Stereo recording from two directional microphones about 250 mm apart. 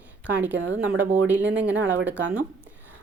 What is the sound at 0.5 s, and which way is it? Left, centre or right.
Speech, right.